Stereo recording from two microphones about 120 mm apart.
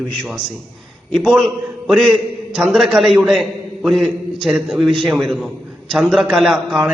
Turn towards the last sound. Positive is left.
turn(degrees=0)  # may be behind; listen again after turning